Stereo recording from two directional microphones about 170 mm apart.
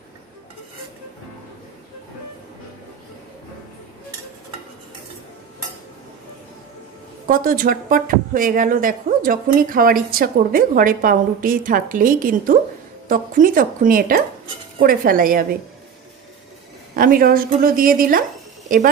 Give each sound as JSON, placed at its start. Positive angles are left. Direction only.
{"t": 7.2, "sound": "speech", "side_deg": -55}
{"t": 16.9, "sound": "speech", "side_deg": -55}